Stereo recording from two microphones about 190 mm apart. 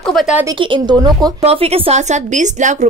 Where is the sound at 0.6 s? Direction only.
25° right (ahead or behind).